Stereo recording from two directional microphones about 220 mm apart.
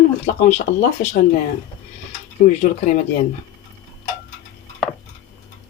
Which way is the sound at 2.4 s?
35° left (ahead or behind).